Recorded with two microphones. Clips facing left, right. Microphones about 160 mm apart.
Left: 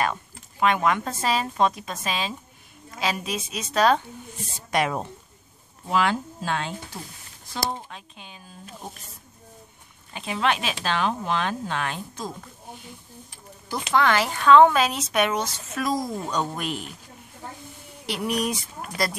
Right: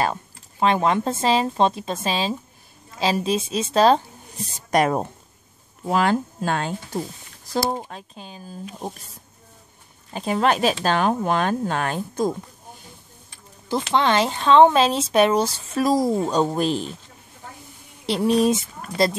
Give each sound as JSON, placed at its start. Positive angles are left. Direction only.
{"t": 0.0, "sound": "speech", "side_deg": -30}
{"t": 10.1, "sound": "speech", "side_deg": -40}
{"t": 13.7, "sound": "speech", "side_deg": -25}
{"t": 18.0, "sound": "speech", "side_deg": -30}